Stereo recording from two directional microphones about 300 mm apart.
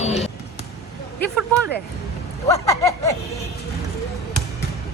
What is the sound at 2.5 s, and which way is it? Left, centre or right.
Speech, centre.